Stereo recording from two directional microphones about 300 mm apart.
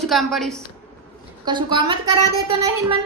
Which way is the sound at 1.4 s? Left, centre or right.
Centre.